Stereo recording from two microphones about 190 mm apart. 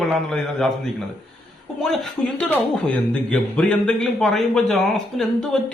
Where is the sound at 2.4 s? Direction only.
5° left (ahead or behind).